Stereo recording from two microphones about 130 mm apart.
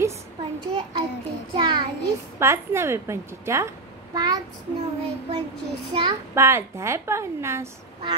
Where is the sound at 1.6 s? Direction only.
35° right (ahead or behind).